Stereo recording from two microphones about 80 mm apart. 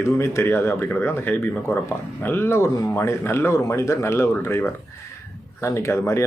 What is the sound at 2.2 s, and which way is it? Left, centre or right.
Speech, left.